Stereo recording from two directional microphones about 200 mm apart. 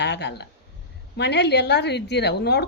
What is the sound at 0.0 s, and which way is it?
A woman's voice, 60° left (ahead or behind).